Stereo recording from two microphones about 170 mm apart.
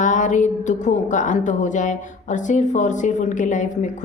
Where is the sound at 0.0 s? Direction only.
45° left (ahead or behind).